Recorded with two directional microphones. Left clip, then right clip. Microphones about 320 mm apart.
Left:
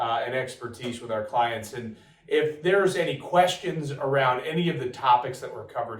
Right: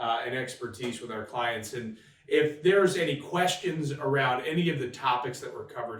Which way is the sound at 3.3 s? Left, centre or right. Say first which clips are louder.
Left 10 dB; centre.